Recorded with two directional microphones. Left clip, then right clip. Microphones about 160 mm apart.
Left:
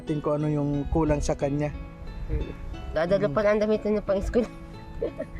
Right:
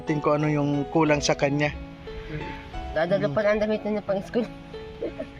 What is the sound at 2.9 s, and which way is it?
Speech, 20° left (ahead or behind).